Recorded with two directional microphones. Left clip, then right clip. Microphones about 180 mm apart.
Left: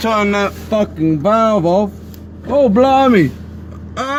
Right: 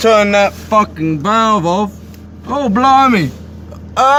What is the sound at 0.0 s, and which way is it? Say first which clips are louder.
Speech: right 6 dB; 15° right (ahead or behind).